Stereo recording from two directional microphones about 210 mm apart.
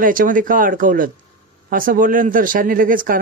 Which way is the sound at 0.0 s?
40° right (ahead or behind).